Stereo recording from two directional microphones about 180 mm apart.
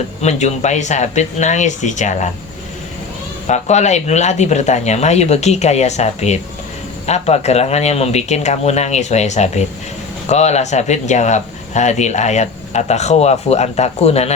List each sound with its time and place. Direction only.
0.2 s speech: 40° left (ahead or behind)
3.4 s speech: 40° left (ahead or behind)